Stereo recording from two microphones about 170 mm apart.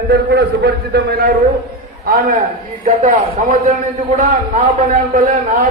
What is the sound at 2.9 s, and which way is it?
Speech, 50° right (ahead or behind).